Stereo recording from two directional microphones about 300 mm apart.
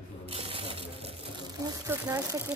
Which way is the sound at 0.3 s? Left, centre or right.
Centre.